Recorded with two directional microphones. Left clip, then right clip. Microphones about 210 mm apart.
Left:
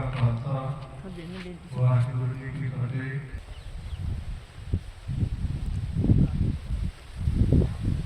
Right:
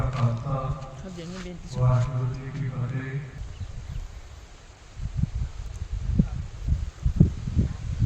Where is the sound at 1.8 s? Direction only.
40° right (ahead or behind).